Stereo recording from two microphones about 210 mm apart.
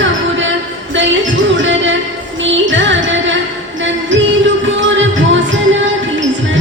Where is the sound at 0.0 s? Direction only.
65° right (ahead or behind).